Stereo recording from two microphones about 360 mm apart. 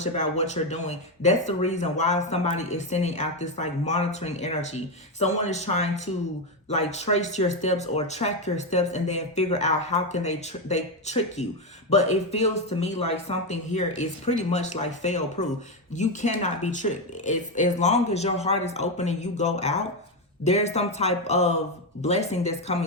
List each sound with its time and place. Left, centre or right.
0.5 s speech: centre